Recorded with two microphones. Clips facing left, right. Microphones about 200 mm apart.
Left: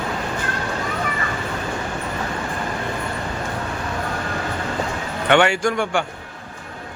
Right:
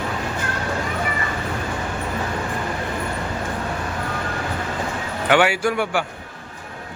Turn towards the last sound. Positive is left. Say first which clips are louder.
# left 1 dB
turn(degrees=-5)  # may be behind; listen again after turning